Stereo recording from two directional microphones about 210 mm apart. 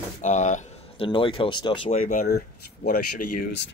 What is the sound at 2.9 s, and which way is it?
Speech, 50° left (ahead or behind).